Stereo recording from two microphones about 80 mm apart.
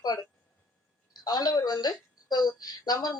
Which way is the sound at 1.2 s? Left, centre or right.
Left.